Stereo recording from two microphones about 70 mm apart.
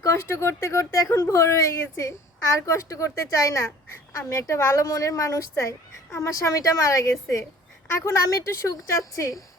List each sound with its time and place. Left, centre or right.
0.0 s a woman's voice: left
7.9 s a woman's voice: left